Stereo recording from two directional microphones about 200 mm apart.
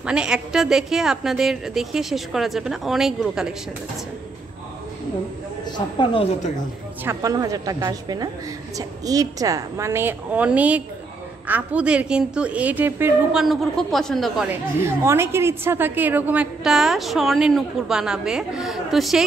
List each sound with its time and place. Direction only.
0.0 s a woman's voice: 5° right (ahead or behind)
5.7 s a woman's voice: 25° left (ahead or behind)
7.1 s a woman's voice: 15° right (ahead or behind); by 19.2 s centre (ahead or behind)